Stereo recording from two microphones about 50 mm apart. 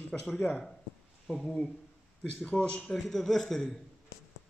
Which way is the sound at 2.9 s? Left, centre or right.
Centre.